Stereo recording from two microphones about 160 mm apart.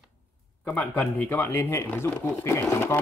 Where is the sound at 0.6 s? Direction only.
10° left (ahead or behind).